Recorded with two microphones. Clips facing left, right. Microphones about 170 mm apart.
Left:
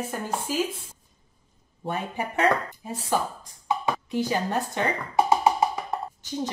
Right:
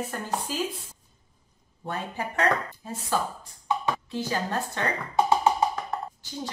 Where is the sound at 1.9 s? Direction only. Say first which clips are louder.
Left 2 dB; 20° left (ahead or behind).